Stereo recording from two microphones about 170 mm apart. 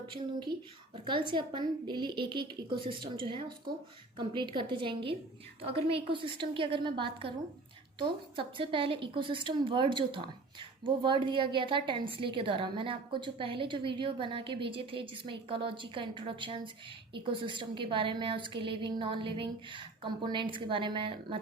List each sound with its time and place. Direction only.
1.0 s a woman's voice: 30° right (ahead or behind)